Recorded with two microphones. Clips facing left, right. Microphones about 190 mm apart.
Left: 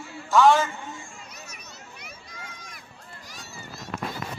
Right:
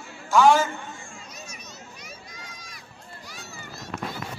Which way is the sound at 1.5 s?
60° left (ahead or behind).